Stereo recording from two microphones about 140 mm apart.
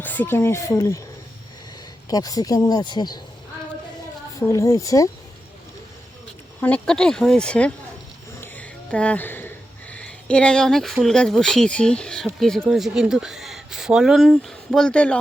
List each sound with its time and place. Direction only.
0.0 s speech: 15° left (ahead or behind)
2.0 s speech: 25° left (ahead or behind)
4.4 s speech: 20° left (ahead or behind)
6.6 s speech: 10° left (ahead or behind)
8.4 s music: 10° left (ahead or behind)
9.9 s speech: 10° left (ahead or behind)